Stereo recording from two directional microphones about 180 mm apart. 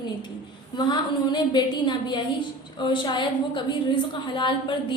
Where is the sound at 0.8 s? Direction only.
25° left (ahead or behind).